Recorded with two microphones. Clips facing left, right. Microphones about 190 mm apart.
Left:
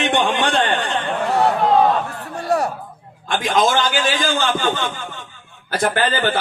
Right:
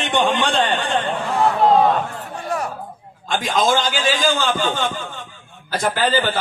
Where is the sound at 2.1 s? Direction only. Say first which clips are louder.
Left 2 dB; 70° left (ahead or behind).